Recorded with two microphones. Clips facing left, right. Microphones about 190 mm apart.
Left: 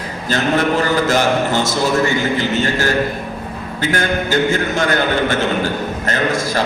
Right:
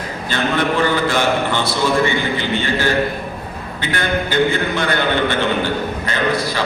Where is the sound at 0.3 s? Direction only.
40° left (ahead or behind).